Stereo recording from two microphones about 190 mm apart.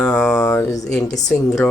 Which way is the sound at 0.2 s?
15° left (ahead or behind).